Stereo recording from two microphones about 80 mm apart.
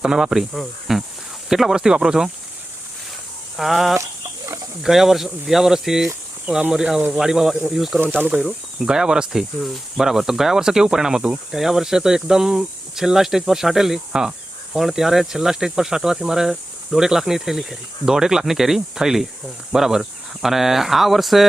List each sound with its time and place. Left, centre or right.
0.0 s speech: centre
3.6 s speech: centre
4.4 s a sound: right
4.8 s speech: centre